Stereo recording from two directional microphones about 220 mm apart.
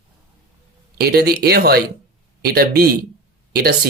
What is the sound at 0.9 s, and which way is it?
Speech, 45° right (ahead or behind).